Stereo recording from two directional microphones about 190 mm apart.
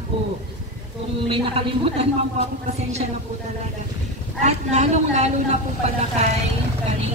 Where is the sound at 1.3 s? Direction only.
30° right (ahead or behind).